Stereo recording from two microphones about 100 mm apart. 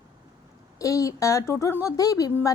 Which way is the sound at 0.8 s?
35° left (ahead or behind).